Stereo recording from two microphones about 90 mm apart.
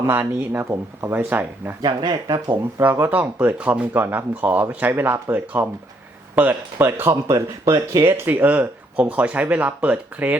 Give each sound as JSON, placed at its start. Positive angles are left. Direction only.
{"t": 0.0, "sound": "speech", "side_deg": -25}
{"t": 1.8, "sound": "speech", "side_deg": -55}
{"t": 2.8, "sound": "speech", "side_deg": -20}